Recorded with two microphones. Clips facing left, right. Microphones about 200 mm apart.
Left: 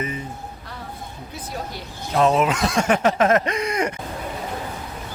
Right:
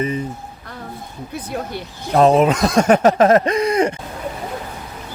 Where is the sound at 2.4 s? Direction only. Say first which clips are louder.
Right 6 dB; 40° right (ahead or behind).